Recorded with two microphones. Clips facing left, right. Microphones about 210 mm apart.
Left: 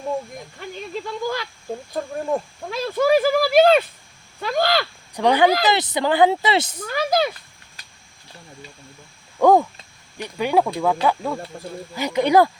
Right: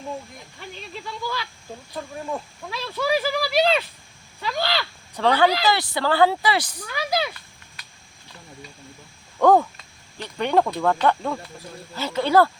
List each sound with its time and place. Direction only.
0.6 s speech: 50° left (ahead or behind)
5.1 s speech: 15° left (ahead or behind)
6.8 s speech: 45° left (ahead or behind)
9.4 s speech: 10° left (ahead or behind)